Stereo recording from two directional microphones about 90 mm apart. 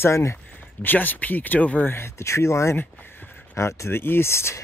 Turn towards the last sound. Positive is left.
turn(degrees=30)  # may be behind; listen again after turning